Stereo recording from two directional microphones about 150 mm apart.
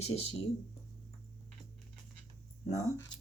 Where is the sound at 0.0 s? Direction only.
40° left (ahead or behind).